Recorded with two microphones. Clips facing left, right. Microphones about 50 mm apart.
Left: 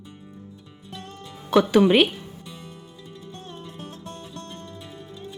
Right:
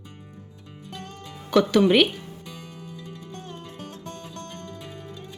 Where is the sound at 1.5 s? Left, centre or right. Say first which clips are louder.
Left 1 dB; centre.